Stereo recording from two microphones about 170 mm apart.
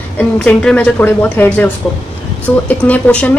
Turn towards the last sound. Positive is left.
turn(degrees=10)  # may be behind; listen again after turning